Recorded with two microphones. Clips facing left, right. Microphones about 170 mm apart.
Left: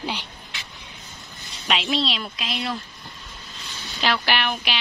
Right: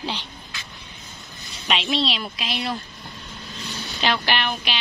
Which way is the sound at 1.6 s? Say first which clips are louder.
Even; centre (ahead or behind).